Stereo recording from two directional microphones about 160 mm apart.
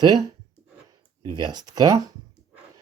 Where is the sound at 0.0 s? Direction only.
25° right (ahead or behind).